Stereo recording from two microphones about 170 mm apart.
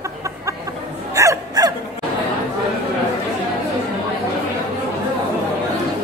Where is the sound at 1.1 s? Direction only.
20° right (ahead or behind).